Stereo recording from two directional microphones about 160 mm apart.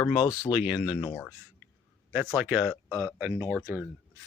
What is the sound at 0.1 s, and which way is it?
Speech, 5° right (ahead or behind).